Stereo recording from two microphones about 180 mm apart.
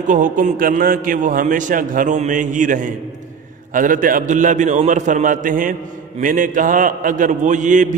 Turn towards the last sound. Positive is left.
turn(degrees=-45)  # may be behind; listen again after turning